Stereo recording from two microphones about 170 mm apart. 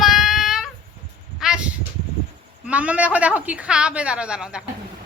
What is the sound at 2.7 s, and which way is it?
Speech, 10° right (ahead or behind).